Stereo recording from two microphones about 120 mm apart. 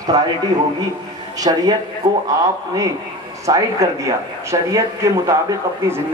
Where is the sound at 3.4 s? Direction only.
25° right (ahead or behind).